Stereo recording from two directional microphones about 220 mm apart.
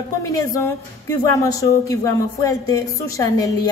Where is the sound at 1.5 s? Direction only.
15° left (ahead or behind).